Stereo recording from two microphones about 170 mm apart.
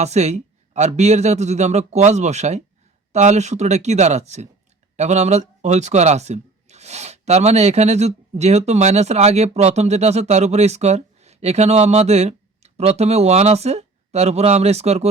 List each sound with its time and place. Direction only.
0.0 s speech: 40° right (ahead or behind)